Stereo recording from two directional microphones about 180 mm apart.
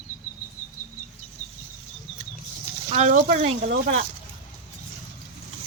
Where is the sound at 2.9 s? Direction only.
40° right (ahead or behind).